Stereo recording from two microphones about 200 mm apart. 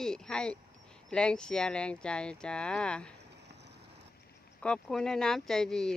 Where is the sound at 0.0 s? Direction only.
5° left (ahead or behind).